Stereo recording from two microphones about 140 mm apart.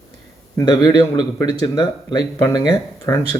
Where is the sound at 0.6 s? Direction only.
30° left (ahead or behind).